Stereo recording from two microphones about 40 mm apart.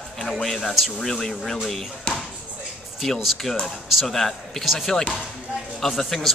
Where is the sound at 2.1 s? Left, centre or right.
Left.